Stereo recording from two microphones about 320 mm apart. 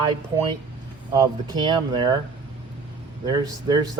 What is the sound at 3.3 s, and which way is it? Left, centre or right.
Speech, centre.